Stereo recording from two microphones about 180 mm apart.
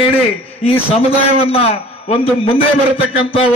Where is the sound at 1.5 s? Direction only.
35° left (ahead or behind).